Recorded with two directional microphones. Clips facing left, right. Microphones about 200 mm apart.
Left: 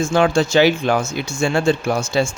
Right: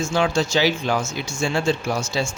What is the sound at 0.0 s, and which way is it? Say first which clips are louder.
Speech: left 5 dB; 55° left (ahead or behind).